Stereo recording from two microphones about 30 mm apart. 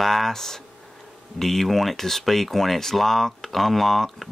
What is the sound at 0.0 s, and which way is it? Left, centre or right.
Speech, centre.